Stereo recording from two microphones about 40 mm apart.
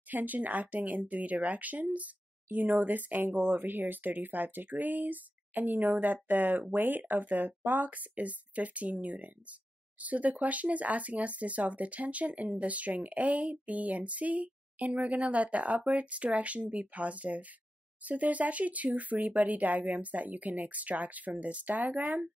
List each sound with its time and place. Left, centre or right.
0.1 s speech: right